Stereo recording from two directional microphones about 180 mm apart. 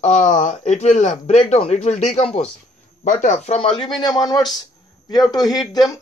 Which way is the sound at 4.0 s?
20° left (ahead or behind).